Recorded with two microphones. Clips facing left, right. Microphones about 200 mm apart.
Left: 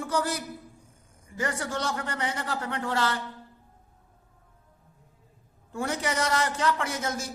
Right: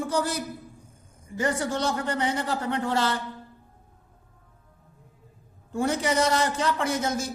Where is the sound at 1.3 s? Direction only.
25° right (ahead or behind).